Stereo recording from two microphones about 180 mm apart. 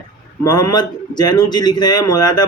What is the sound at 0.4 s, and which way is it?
A man's voice, 20° left (ahead or behind).